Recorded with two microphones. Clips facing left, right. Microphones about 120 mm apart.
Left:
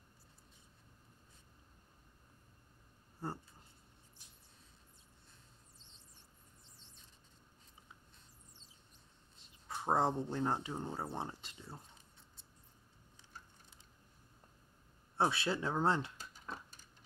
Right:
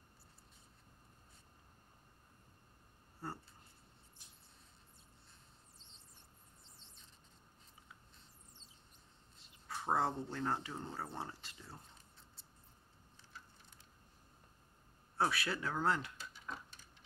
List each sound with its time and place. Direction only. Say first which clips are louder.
9.7 s speech: left 3 dB; 20° left (ahead or behind)
15.1 s speech: left 2 dB; 25° left (ahead or behind)
16.2 s a sound: even; 40° left (ahead or behind)